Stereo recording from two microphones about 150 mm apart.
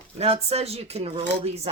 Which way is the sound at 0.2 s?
45° right (ahead or behind).